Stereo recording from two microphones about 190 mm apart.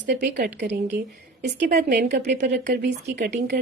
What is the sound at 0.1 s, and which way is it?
A woman's voice, 60° right (ahead or behind).